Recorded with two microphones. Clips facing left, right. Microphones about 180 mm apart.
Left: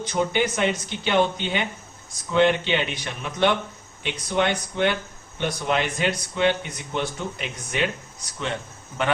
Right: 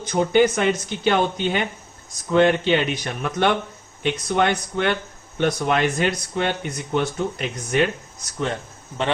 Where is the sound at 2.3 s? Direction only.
45° right (ahead or behind).